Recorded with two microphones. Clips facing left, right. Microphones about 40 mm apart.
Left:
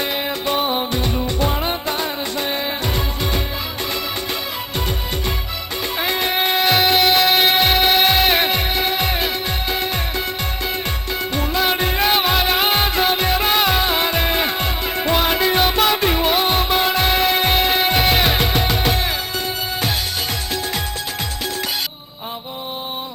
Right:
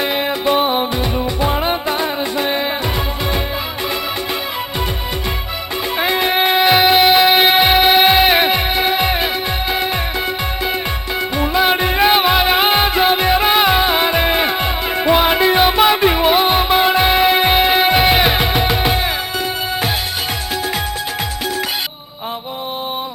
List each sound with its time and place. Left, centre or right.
0.0 s music: centre
6.0 s music: centre
11.3 s music: centre